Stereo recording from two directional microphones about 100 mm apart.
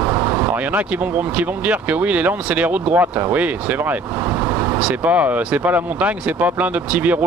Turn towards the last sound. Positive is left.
turn(degrees=-15)  # may be behind; listen again after turning